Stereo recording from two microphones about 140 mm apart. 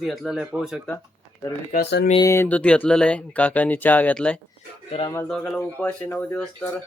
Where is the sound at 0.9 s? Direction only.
25° left (ahead or behind); by 4.4 s 10° left (ahead or behind).